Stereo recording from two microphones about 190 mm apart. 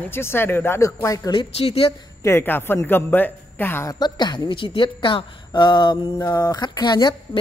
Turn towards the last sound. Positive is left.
turn(degrees=25)  # may be behind; listen again after turning